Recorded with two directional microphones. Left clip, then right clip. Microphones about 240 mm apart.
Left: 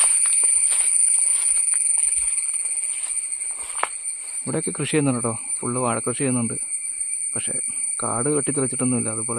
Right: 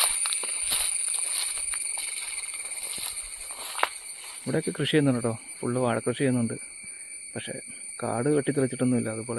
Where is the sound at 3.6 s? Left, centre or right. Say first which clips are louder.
Even; right.